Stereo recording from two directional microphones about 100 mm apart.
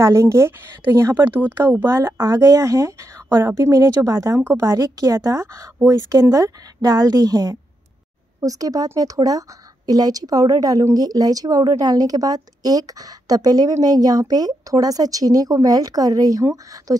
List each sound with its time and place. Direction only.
0.0 s a woman's voice: 30° right (ahead or behind)
4.7 s a woman's voice: 35° right (ahead or behind)